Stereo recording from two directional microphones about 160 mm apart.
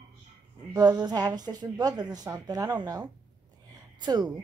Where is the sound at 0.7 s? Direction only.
25° right (ahead or behind).